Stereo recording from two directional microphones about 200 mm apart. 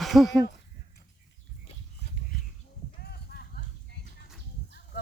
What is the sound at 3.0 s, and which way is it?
Clip-clop, 50° left (ahead or behind).